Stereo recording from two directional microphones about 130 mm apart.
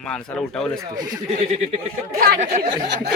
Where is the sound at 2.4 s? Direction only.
65° right (ahead or behind).